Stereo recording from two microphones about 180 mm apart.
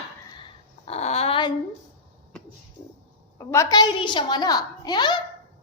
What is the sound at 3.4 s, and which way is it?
A woman's voice, 20° left (ahead or behind).